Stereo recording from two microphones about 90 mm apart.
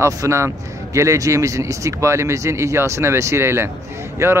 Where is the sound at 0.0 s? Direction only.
35° right (ahead or behind).